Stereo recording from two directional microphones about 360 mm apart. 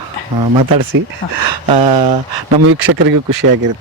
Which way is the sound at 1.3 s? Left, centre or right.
Right.